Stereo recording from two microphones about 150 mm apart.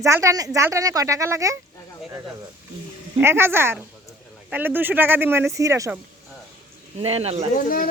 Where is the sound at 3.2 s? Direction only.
15° right (ahead or behind).